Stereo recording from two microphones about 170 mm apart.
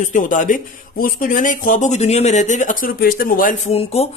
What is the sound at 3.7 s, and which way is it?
Speech, 35° left (ahead or behind).